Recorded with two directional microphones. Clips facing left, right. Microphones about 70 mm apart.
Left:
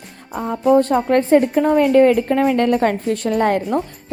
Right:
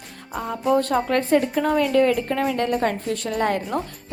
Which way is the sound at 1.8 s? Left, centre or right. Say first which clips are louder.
Left 6 dB; left.